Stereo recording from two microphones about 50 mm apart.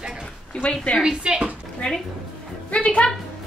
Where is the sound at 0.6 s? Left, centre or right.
Left.